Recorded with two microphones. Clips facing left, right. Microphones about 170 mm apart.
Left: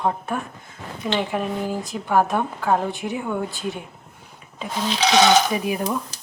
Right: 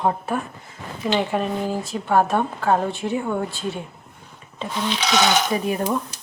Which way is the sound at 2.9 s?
15° left (ahead or behind).